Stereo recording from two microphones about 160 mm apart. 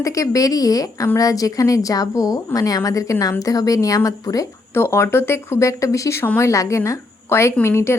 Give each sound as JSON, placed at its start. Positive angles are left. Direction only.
{"t": 0.0, "sound": "a woman's voice", "side_deg": 20}